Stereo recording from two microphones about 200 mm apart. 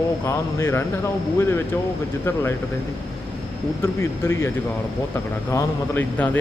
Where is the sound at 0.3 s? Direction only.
15° left (ahead or behind).